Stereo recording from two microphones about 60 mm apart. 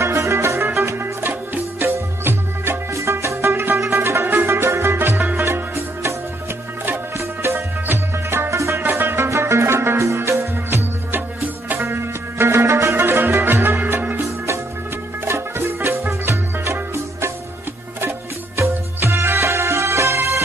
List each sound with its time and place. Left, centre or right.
0.0 s music: right
0.6 s music: right
2.9 s music: right
6.9 s music: right
9.3 s music: right
15.2 s music: right
18.6 s music: right